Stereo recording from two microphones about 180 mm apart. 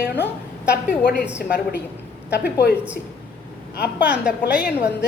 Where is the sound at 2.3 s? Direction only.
60° left (ahead or behind).